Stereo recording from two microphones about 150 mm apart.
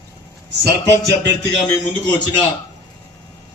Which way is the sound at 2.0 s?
30° left (ahead or behind).